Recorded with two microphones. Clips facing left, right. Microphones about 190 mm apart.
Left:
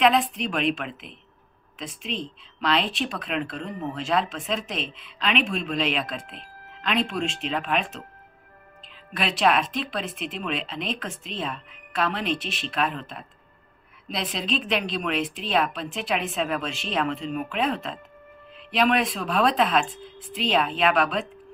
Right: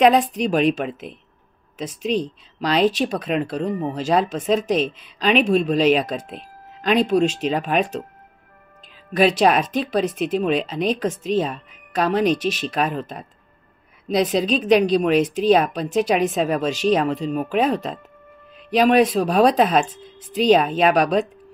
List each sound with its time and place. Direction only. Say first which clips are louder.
0.0 s speech: right 6 dB; 40° right (ahead or behind)
9.1 s speech: right 7 dB; 40° right (ahead or behind)